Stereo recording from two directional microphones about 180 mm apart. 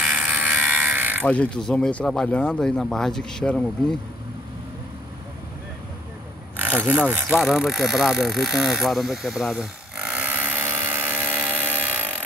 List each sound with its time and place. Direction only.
0.0 s electric shaver: 5° right (ahead or behind)
1.2 s speech: 5° left (ahead or behind)
7.1 s mechanisms: 10° right (ahead or behind)